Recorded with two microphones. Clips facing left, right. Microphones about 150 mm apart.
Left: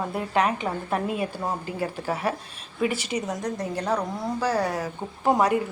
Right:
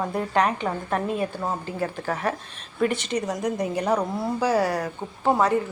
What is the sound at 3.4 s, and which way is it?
A woman's voice, 10° right (ahead or behind).